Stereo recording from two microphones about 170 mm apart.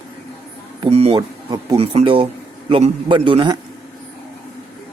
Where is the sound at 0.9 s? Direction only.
40° right (ahead or behind).